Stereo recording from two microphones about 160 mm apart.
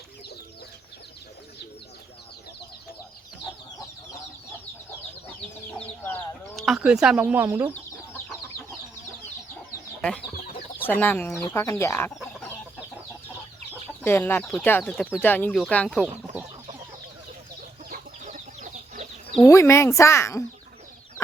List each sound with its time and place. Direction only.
5.7 s chicken: 10° left (ahead or behind)
6.6 s speech: 5° right (ahead or behind)
7.7 s chicken: 15° left (ahead or behind)
10.0 s chicken: 5° left (ahead or behind)
10.8 s speech: 10° left (ahead or behind)
14.0 s speech: 15° left (ahead or behind)
14.4 s speech: centre (ahead or behind)
17.8 s chicken: 50° right (ahead or behind)
19.4 s speech: 20° left (ahead or behind)